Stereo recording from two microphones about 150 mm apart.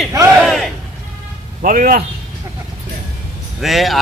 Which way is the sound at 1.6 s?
70° right (ahead or behind).